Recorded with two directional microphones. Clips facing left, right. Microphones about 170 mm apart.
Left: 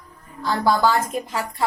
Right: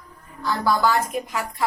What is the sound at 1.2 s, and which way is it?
Speech, 30° left (ahead or behind).